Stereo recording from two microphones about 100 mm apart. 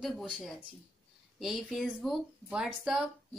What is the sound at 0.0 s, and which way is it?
Speech, centre (ahead or behind).